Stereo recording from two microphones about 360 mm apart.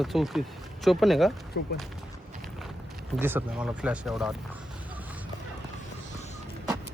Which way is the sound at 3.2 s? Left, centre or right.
Centre.